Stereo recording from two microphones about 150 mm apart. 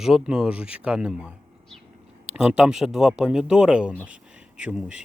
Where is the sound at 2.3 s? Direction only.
5° right (ahead or behind).